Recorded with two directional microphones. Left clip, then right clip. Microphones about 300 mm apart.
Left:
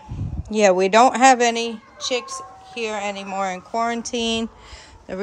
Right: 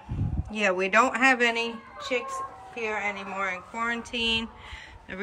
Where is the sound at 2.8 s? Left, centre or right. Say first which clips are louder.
Left 4 dB; centre.